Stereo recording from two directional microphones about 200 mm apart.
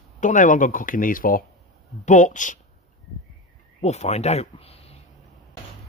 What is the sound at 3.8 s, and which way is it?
Speech, 35° left (ahead or behind).